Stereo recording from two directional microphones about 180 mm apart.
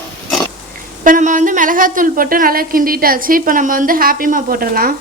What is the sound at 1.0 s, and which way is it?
A woman's voice, 45° right (ahead or behind).